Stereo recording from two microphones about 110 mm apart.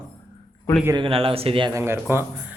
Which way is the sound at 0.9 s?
55° right (ahead or behind).